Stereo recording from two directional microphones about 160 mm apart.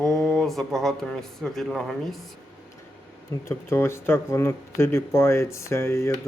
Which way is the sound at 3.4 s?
15° left (ahead or behind).